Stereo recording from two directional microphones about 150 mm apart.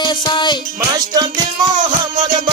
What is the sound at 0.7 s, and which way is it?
Music, 25° right (ahead or behind).